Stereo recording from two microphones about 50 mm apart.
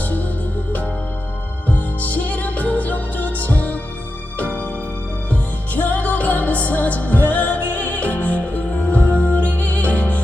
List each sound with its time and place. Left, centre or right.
1.7 s music: left
5.3 s music: left